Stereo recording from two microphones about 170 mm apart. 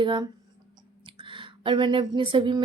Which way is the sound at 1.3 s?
30° right (ahead or behind).